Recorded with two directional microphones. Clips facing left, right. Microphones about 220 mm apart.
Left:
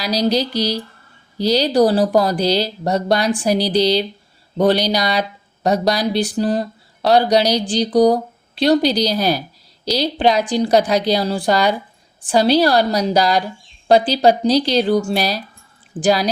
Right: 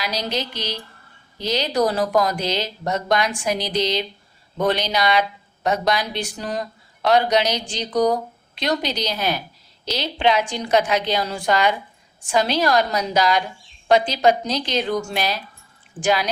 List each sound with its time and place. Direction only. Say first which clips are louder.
0.0 s a woman's voice: left 8 dB; 35° left (ahead or behind)